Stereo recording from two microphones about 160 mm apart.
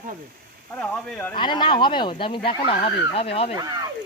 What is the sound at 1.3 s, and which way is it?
Speech, 30° left (ahead or behind).